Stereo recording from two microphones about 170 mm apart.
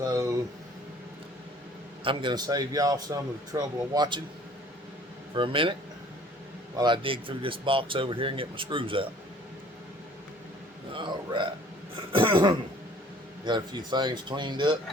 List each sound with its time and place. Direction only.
0.0 s a sound: 20° right (ahead or behind)
2.0 s speech: 25° right (ahead or behind)
5.3 s speech: 30° right (ahead or behind)
6.7 s speech: 25° right (ahead or behind)
10.9 s speech: 30° right (ahead or behind)
12.1 s cough: 30° right (ahead or behind)
13.4 s speech: 25° right (ahead or behind)